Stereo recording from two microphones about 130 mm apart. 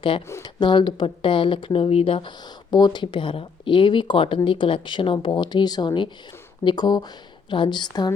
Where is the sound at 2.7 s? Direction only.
35° left (ahead or behind).